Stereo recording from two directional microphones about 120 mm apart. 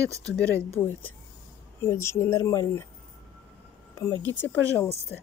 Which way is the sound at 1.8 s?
20° left (ahead or behind).